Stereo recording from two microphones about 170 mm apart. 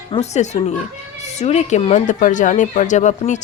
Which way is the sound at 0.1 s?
40° left (ahead or behind).